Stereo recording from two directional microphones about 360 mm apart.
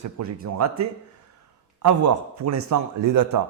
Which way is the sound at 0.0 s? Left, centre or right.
Right.